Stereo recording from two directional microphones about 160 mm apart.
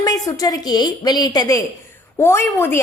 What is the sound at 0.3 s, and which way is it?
A woman's voice, 25° left (ahead or behind).